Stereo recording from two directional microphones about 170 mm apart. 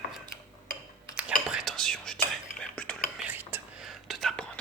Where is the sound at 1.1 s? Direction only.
5° right (ahead or behind).